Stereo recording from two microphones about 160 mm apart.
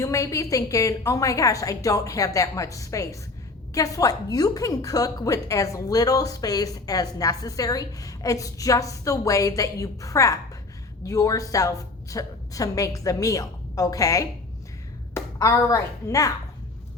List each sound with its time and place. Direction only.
0.0 s a woman's voice: 20° left (ahead or behind)